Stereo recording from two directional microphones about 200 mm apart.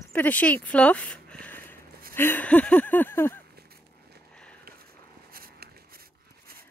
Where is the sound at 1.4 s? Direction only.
10° left (ahead or behind).